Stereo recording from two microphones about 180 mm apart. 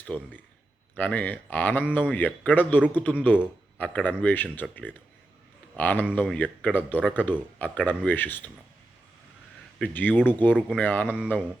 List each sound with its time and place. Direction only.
0.1 s a man's voice: 10° left (ahead or behind)
9.7 s a man's voice: 10° left (ahead or behind)